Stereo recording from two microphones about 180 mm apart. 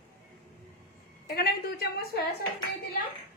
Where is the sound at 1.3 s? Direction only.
60° left (ahead or behind).